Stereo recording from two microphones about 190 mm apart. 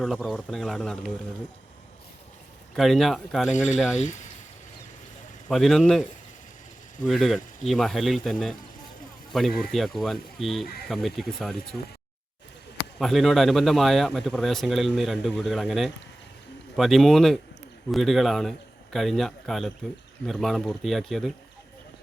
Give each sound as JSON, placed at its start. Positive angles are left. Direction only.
{"t": 0.0, "sound": "speech", "side_deg": 5}
{"t": 2.7, "sound": "speech", "side_deg": 0}
{"t": 3.9, "sound": "speech", "side_deg": 40}
{"t": 5.5, "sound": "speech", "side_deg": 0}
{"t": 9.6, "sound": "speech", "side_deg": 0}